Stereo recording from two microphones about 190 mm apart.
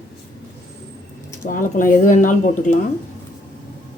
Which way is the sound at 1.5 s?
45° left (ahead or behind).